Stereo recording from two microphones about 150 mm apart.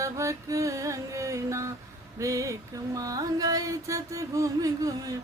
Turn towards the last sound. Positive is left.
turn(degrees=-25)  # may be behind; listen again after turning